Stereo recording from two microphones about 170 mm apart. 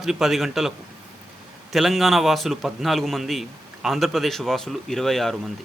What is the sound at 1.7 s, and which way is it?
A man's voice, centre (ahead or behind).